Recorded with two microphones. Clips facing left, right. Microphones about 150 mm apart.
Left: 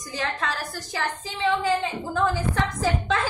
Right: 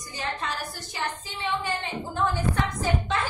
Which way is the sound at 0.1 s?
90° left.